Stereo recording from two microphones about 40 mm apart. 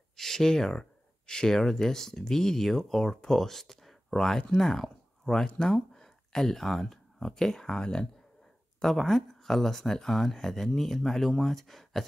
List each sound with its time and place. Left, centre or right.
0.1 s speech: centre
8.8 s speech: centre